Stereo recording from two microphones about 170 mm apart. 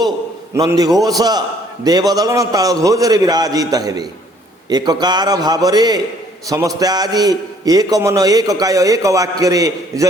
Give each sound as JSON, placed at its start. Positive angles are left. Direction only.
{"t": 0.5, "sound": "a man's voice", "side_deg": -20}